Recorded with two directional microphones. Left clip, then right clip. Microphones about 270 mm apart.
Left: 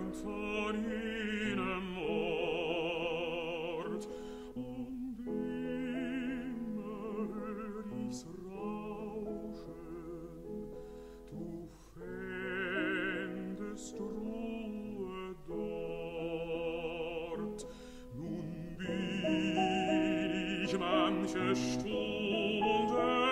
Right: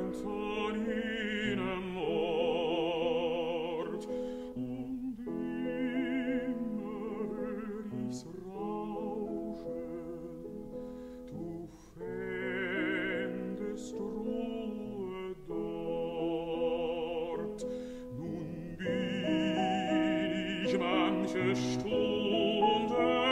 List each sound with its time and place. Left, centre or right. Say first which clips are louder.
0.2 s music: even; left
5.9 s opera: right 5 dB; left
12.3 s music: right 1 dB; centre
18.9 s music: right 3 dB; centre